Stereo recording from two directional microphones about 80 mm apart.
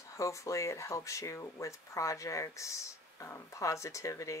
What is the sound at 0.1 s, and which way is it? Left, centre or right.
Speech, left.